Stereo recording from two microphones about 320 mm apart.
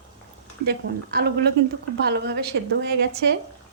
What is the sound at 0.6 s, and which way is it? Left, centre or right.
A woman's voice, right.